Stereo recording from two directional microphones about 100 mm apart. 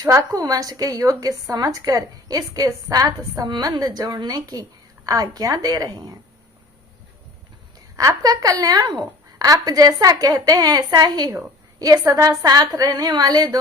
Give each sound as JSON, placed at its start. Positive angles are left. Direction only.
{"t": 0.0, "sound": "a woman's voice", "side_deg": -35}
{"t": 7.9, "sound": "a woman's voice", "side_deg": -35}